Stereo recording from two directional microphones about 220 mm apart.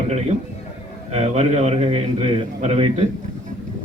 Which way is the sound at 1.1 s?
30° right (ahead or behind).